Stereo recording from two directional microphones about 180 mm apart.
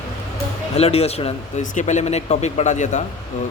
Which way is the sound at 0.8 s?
35° left (ahead or behind).